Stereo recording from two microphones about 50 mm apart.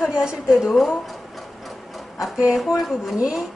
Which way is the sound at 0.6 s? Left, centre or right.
Centre.